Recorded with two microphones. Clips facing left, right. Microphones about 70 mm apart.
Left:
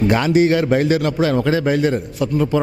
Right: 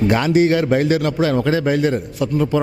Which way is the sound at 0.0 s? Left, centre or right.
Centre.